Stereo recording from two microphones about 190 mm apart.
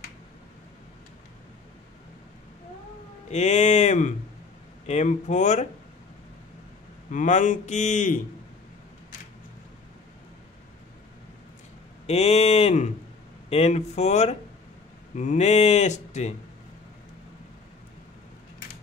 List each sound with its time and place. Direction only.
3.3 s speech: 35° left (ahead or behind)
7.1 s speech: 40° left (ahead or behind)
12.1 s speech: 35° left (ahead or behind)